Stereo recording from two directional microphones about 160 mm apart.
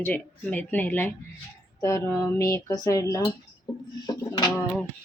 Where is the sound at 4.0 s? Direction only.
25° left (ahead or behind).